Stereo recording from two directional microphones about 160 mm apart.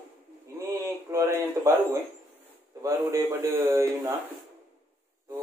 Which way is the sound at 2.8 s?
20° right (ahead or behind).